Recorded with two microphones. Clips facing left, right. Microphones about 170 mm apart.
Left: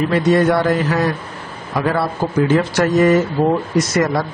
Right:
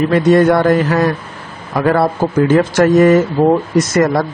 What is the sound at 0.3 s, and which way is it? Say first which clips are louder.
Speech: right 5 dB; 50° right (ahead or behind).